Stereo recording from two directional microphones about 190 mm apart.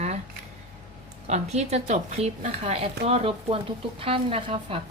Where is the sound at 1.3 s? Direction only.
35° right (ahead or behind).